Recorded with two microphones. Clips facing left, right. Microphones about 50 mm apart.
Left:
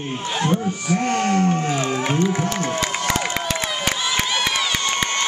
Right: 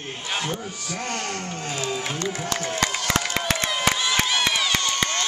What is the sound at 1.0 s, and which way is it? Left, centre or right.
Speech, left.